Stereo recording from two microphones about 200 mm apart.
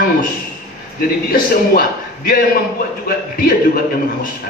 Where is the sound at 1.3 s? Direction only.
45° left (ahead or behind).